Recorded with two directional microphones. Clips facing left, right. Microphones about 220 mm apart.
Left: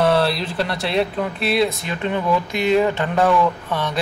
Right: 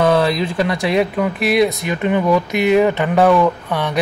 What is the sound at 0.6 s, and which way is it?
Speech, 10° right (ahead or behind).